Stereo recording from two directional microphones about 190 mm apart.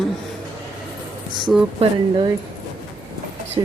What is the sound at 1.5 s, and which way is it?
Speech, 5° right (ahead or behind).